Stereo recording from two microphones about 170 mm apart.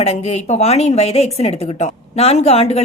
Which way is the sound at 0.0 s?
40° left (ahead or behind).